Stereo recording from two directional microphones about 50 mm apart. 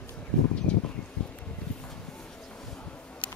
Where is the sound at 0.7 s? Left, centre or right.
Left.